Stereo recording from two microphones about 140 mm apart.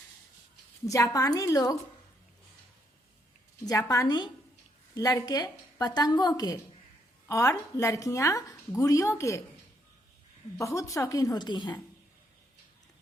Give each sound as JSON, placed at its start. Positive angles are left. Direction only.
{"t": 0.9, "sound": "a woman's voice", "side_deg": 25}
{"t": 3.7, "sound": "a woman's voice", "side_deg": 25}
{"t": 10.6, "sound": "a woman's voice", "side_deg": 20}